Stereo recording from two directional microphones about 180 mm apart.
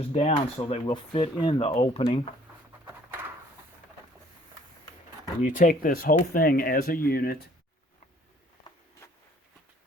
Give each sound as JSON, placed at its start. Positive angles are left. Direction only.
{"t": 0.1, "sound": "speech", "side_deg": 35}
{"t": 5.4, "sound": "speech", "side_deg": 50}